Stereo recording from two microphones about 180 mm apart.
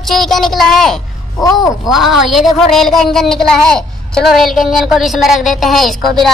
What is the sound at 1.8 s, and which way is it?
Speech, centre (ahead or behind).